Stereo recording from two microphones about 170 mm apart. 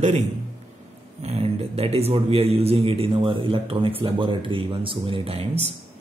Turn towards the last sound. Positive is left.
turn(degrees=-35)  # may be behind; listen again after turning